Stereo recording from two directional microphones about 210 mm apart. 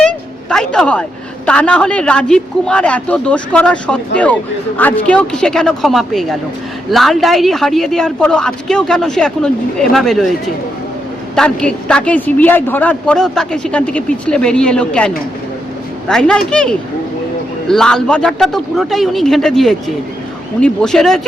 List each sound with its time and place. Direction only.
0.5 s a woman's voice: 5° left (ahead or behind)
11.3 s a woman's voice: 5° left (ahead or behind)